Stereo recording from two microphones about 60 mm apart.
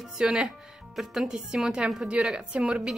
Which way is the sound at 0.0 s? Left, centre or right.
Centre.